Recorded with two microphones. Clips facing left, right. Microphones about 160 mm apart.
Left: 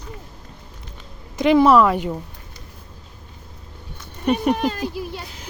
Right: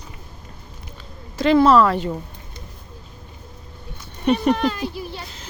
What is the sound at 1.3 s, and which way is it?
Speech, 15° left (ahead or behind).